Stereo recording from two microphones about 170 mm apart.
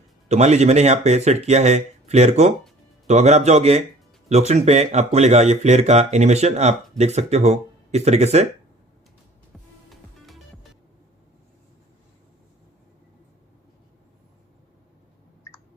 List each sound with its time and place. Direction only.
0.3 s speech: 40° right (ahead or behind)
9.9 s music: centre (ahead or behind)